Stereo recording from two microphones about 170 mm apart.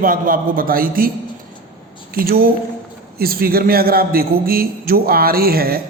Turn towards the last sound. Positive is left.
turn(degrees=-60)  # may be behind; listen again after turning